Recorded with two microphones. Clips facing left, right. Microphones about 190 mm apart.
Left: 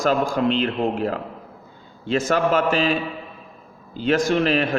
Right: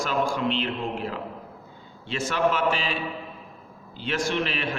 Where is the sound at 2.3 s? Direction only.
45° left (ahead or behind).